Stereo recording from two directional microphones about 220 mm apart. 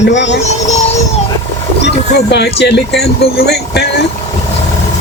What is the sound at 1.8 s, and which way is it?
Speech, 50° left (ahead or behind).